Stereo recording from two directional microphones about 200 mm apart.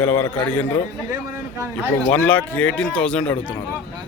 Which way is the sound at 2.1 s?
5° left (ahead or behind).